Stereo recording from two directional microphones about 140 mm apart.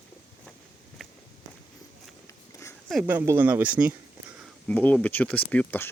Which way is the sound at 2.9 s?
10° right (ahead or behind).